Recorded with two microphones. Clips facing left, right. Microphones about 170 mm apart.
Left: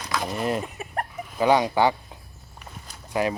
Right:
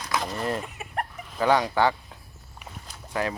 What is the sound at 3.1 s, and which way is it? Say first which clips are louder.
Speech: left 4 dB; 15° left (ahead or behind).